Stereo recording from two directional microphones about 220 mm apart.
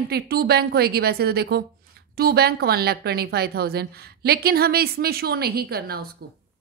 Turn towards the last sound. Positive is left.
turn(degrees=-45)  # may be behind; listen again after turning